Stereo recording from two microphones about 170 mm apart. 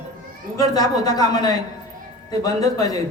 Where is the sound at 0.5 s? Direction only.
20° left (ahead or behind).